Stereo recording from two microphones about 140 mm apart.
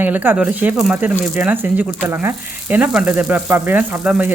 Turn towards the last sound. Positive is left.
turn(degrees=-10)  # may be behind; listen again after turning